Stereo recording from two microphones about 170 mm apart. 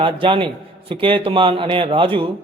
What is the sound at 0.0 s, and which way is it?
A man's voice, 30° right (ahead or behind).